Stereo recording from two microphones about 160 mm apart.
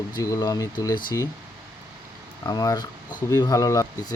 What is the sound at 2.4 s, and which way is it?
Speech, 20° left (ahead or behind).